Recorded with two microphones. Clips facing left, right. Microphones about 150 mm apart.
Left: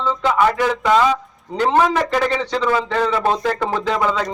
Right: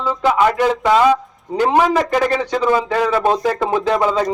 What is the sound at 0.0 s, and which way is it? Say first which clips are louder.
Speech: right 2 dB; 10° right (ahead or behind).